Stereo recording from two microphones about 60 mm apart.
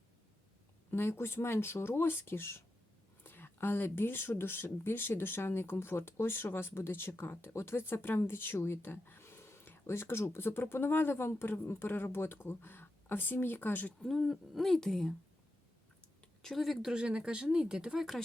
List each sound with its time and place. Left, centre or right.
0.9 s speech: left
14.0 s speech: centre
16.4 s speech: centre
16.9 s speech: centre